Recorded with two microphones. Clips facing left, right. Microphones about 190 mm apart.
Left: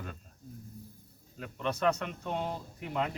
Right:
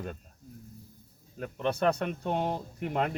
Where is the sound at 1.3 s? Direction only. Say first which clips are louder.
Right 4 dB; 45° right (ahead or behind).